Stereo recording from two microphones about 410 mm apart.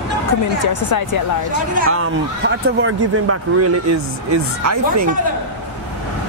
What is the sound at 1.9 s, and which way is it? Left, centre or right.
Speech, right.